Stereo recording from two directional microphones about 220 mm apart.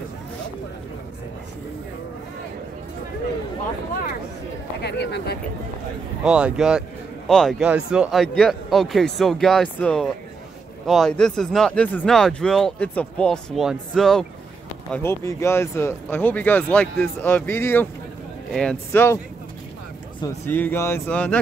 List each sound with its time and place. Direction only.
4.8 s speech: 50° left (ahead or behind)
6.2 s speech: 5° right (ahead or behind)
20.2 s speech: 10° left (ahead or behind)